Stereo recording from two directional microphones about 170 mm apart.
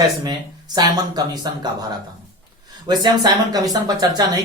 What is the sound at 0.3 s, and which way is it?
Speech, 25° right (ahead or behind).